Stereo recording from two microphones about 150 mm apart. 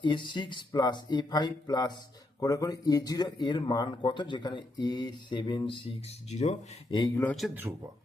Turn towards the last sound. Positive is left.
turn(degrees=0)  # may be behind; listen again after turning